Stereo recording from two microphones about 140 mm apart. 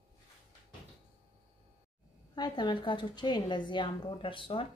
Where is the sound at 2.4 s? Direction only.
30° left (ahead or behind).